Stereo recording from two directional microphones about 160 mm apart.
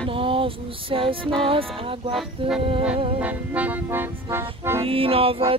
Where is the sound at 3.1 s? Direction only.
10° right (ahead or behind).